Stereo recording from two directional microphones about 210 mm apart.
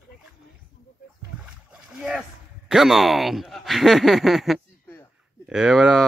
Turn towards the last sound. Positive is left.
turn(degrees=0)  # may be behind; listen again after turning